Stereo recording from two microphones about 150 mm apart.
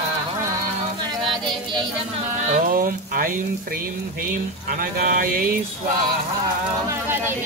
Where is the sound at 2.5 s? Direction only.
70° right (ahead or behind).